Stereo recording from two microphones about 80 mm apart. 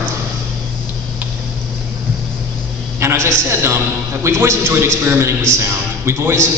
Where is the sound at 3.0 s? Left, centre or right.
Right.